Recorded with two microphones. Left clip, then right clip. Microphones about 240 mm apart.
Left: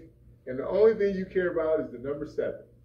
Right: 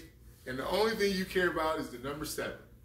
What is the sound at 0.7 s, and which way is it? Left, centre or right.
Speech, right.